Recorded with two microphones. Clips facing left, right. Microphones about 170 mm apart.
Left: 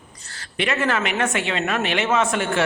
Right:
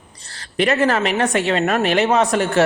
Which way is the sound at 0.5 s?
40° right (ahead or behind).